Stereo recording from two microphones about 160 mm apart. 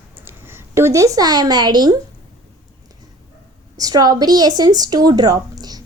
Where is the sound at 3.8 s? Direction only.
25° right (ahead or behind).